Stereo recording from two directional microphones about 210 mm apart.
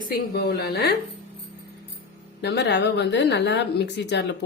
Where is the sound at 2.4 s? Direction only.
50° left (ahead or behind).